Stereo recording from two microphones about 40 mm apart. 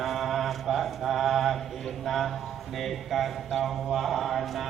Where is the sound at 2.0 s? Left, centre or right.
Centre.